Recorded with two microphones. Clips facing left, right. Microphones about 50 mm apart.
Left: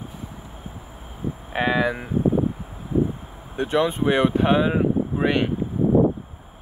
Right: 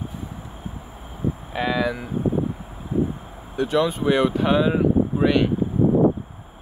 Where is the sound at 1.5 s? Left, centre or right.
Left.